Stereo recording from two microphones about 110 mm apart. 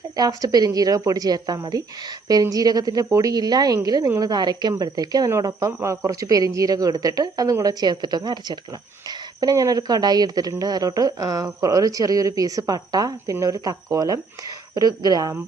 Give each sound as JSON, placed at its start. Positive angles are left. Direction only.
{"t": 0.2, "sound": "a woman's voice", "side_deg": -35}